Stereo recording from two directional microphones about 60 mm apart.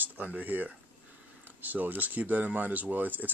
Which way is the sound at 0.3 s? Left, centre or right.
Right.